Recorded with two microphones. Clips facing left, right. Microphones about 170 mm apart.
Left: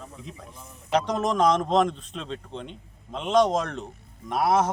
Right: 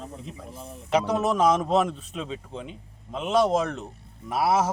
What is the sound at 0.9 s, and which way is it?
Speech, 5° right (ahead or behind).